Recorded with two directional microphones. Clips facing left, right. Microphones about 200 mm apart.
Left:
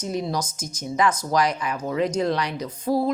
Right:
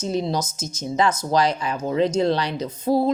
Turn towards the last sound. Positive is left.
turn(degrees=-25)  # may be behind; listen again after turning